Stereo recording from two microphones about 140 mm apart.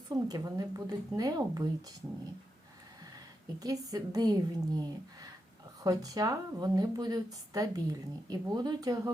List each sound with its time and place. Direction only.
0.1 s a woman's voice: 25° right (ahead or behind)
3.6 s a woman's voice: 25° right (ahead or behind)